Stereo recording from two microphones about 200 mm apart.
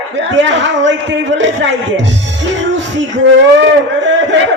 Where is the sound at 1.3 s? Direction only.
65° right (ahead or behind).